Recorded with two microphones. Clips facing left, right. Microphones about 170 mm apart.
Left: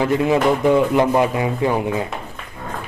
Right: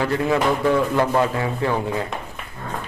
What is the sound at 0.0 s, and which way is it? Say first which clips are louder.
Speech: left 3 dB; 20° left (ahead or behind).